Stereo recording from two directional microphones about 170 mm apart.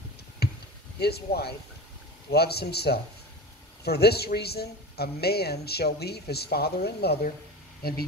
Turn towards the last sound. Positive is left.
turn(degrees=65)  # may be behind; listen again after turning